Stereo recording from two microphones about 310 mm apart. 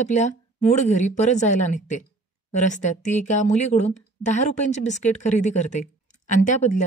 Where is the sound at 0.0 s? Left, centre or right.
Left.